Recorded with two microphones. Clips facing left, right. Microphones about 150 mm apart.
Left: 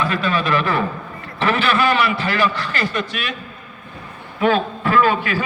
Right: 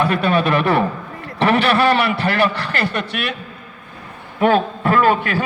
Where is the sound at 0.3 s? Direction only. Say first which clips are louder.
Right 3 dB; 60° right (ahead or behind).